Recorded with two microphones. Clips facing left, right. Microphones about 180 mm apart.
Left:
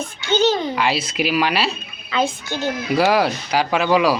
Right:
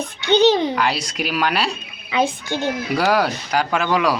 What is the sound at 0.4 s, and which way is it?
Speech, 20° right (ahead or behind).